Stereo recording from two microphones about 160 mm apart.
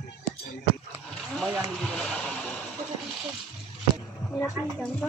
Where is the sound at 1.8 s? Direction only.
5° left (ahead or behind).